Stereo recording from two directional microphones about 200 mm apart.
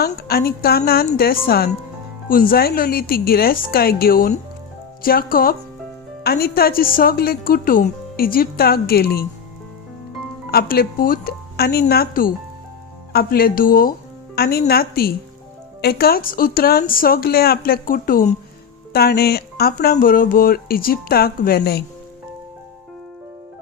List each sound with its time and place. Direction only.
0.0 s a woman's voice: 50° left (ahead or behind)
10.5 s a woman's voice: 50° left (ahead or behind)